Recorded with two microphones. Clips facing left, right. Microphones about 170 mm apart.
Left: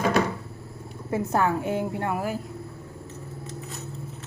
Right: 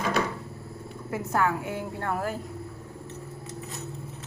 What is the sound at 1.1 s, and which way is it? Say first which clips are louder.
A woman's voice: left 3 dB; 25° left (ahead or behind).